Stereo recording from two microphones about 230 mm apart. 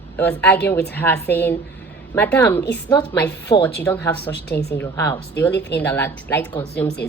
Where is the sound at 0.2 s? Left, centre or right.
Centre.